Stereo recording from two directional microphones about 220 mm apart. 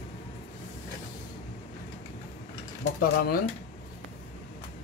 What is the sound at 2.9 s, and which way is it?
Speech, 45° left (ahead or behind).